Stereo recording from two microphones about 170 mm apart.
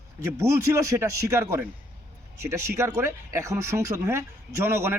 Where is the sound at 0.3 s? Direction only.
20° right (ahead or behind).